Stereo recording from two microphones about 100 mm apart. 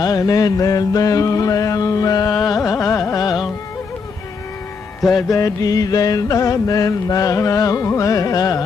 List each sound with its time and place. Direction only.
0.0 s mantra: 40° left (ahead or behind)
2.5 s carnatic music: 30° left (ahead or behind)
2.8 s carnatic music: 20° left (ahead or behind)
3.1 s carnatic music: 40° left (ahead or behind)
5.3 s mantra: 35° left (ahead or behind)